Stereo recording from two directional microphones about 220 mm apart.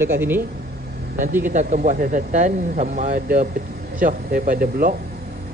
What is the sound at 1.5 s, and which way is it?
Speech, 35° right (ahead or behind).